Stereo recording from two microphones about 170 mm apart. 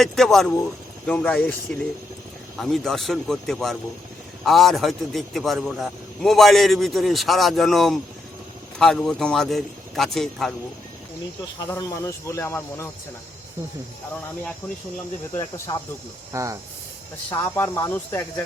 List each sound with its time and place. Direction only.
0.0 s a man's voice: centre (ahead or behind)
2.6 s a man's voice: centre (ahead or behind)
11.7 s speech: 20° left (ahead or behind)
15.4 s speech: 20° left (ahead or behind)
16.3 s speech: 20° right (ahead or behind)
17.3 s speech: 15° left (ahead or behind)